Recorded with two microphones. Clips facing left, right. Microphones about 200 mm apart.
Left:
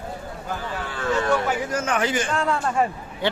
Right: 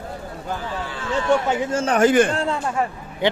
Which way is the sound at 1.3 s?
25° right (ahead or behind).